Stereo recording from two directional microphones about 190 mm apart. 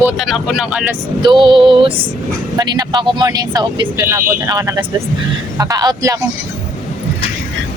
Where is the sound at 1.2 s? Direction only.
25° right (ahead or behind).